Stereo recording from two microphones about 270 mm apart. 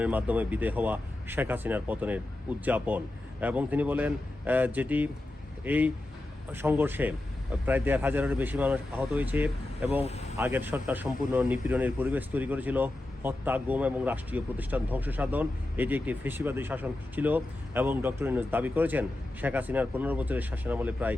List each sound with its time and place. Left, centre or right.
0.0 s speech: centre
10.0 s speech: left
10.3 s speech: centre